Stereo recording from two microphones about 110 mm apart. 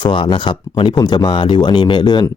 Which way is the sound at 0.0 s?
45° left (ahead or behind).